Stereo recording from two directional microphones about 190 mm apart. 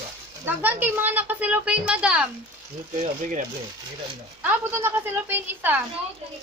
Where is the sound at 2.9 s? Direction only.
40° right (ahead or behind).